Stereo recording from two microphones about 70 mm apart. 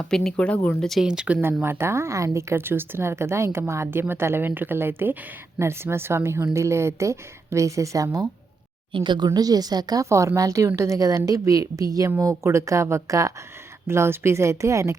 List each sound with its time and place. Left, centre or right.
0.0 s speech: centre
0.8 s speech: centre
1.0 s speech: centre
1.6 s a woman's voice: right
9.0 s a woman's voice: right
10.0 s a woman's voice: right
12.2 s speech: right
13.8 s a woman's voice: right